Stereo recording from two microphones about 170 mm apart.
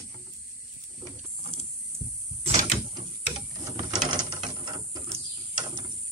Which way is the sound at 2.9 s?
20° right (ahead or behind).